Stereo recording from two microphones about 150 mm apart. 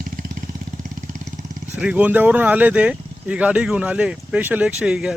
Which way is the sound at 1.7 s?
10° right (ahead or behind).